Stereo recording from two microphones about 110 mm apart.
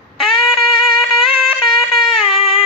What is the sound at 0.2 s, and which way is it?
Music, centre (ahead or behind).